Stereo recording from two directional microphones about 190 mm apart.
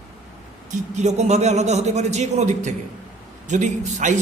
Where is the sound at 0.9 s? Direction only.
35° right (ahead or behind).